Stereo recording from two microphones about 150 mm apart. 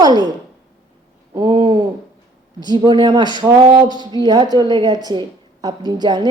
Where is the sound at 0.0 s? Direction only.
30° right (ahead or behind).